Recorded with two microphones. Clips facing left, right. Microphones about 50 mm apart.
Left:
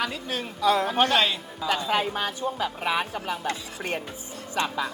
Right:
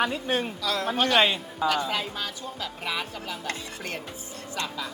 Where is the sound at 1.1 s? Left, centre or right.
Right.